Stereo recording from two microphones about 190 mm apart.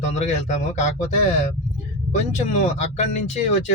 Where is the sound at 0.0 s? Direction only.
35° left (ahead or behind).